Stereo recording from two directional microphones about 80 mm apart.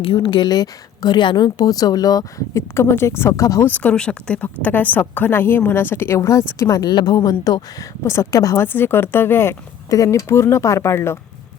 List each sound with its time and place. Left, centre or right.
0.0 s a woman's voice: left
3.6 s a woman's voice: centre; by 6.9 s left
6.9 s a woman's voice: left
8.0 s speech: left
8.5 s a woman's voice: left
9.9 s speech: left